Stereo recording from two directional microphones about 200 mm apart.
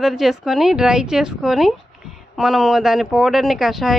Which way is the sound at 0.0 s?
Centre (ahead or behind).